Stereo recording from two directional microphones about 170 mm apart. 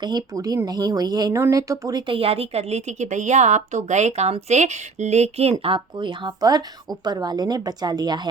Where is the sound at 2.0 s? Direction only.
30° right (ahead or behind).